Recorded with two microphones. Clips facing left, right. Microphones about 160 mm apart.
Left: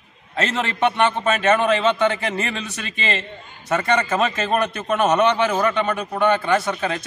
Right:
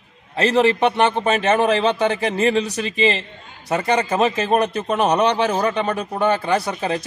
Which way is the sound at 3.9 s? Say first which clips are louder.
Right 3 dB; 15° right (ahead or behind).